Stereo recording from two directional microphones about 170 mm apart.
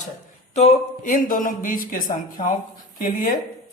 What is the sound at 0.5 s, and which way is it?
A man's voice, 40° left (ahead or behind).